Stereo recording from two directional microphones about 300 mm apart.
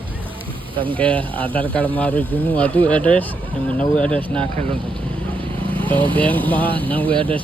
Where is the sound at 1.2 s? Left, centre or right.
Centre.